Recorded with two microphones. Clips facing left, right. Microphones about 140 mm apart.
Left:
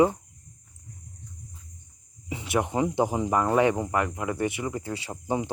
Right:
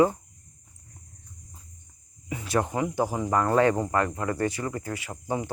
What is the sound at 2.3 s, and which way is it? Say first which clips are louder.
Speech: even; 25° left (ahead or behind).